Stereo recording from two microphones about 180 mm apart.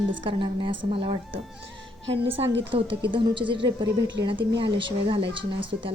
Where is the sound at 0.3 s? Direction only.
30° right (ahead or behind).